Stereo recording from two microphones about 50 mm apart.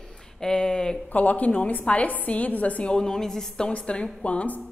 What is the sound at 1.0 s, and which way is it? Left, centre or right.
A woman's voice, left.